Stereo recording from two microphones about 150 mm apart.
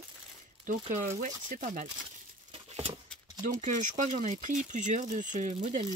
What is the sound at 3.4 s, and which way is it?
Speech, 60° right (ahead or behind).